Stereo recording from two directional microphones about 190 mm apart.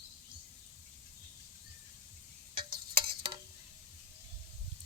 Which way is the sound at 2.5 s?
25° right (ahead or behind).